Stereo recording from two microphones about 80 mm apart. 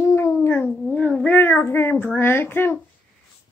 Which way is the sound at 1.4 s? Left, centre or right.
Left.